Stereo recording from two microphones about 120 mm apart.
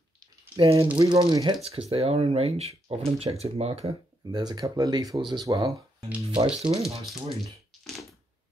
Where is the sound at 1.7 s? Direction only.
55° right (ahead or behind).